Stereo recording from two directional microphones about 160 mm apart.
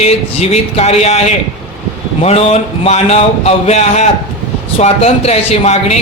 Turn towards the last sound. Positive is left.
turn(degrees=45)  # may be behind; listen again after turning